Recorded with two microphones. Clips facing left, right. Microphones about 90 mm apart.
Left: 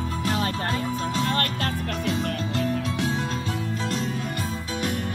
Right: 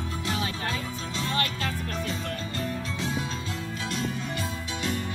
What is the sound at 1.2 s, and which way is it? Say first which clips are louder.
Music: left 2 dB; 55° left (ahead or behind).